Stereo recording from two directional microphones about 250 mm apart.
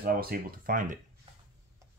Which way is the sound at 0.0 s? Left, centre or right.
Right.